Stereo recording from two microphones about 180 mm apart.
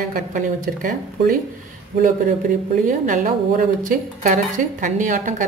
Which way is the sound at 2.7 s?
45° right (ahead or behind).